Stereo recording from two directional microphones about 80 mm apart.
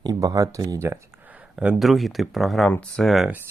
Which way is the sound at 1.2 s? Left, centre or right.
Centre.